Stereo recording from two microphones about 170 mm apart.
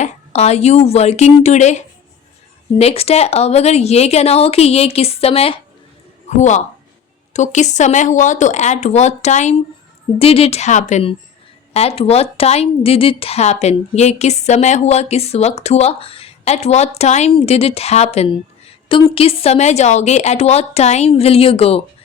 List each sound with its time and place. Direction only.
0.0 s a woman's voice: 40° left (ahead or behind)